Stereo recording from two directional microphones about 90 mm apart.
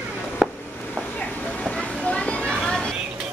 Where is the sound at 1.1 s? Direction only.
10° left (ahead or behind).